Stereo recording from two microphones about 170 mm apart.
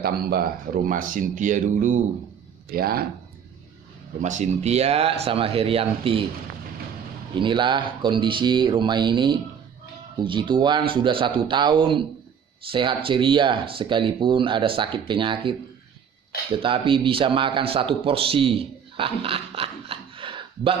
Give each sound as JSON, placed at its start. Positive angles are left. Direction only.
{"t": 0.0, "sound": "speech", "side_deg": -65}
{"t": 2.7, "sound": "speech", "side_deg": -65}
{"t": 4.2, "sound": "speech", "side_deg": -45}
{"t": 7.3, "sound": "speech", "side_deg": -30}